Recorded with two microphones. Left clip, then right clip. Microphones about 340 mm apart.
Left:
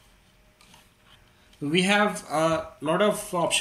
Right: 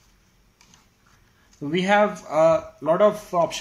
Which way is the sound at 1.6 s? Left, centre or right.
Right.